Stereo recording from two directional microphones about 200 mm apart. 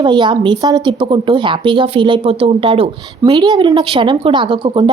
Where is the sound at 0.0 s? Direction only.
25° right (ahead or behind).